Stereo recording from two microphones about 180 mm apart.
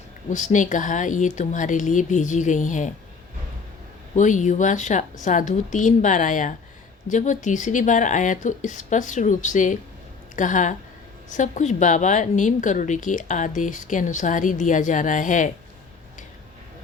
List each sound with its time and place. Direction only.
0.3 s a woman's voice: 45° left (ahead or behind)
4.1 s a woman's voice: 45° left (ahead or behind)